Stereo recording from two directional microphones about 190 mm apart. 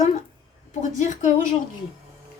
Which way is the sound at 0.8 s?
40° left (ahead or behind).